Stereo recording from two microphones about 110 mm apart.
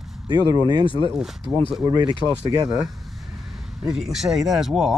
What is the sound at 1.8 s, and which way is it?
Speech, 40° right (ahead or behind).